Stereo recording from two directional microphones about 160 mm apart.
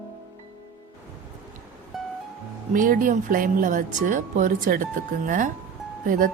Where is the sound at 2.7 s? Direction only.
55° right (ahead or behind).